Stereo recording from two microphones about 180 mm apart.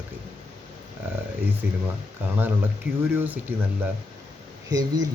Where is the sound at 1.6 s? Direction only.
10° right (ahead or behind).